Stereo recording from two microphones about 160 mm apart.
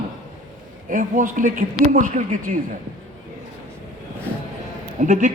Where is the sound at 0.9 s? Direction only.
55° right (ahead or behind).